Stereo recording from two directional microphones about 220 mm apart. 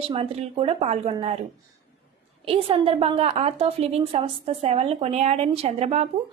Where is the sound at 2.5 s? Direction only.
25° right (ahead or behind).